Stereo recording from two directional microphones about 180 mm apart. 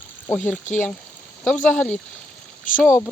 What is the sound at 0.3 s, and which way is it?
Speech, 10° left (ahead or behind).